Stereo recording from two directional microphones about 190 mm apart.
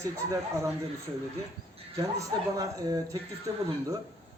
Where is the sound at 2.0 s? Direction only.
15° right (ahead or behind).